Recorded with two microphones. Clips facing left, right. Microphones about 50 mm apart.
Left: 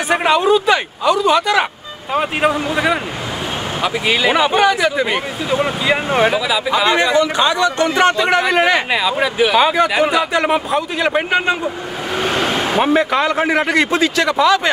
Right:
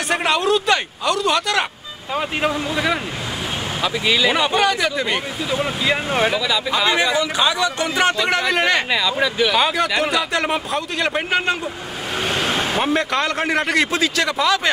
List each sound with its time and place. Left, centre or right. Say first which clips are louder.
0.1 s speech: left 5 dB; centre
2.1 s speech: left 5 dB; centre
3.8 s speech: left 2 dB; left
4.3 s speech: left 4 dB; centre
8.9 s speech: left 3 dB; left
9.6 s speech: left 5 dB; centre
12.2 s speech: left 3 dB; centre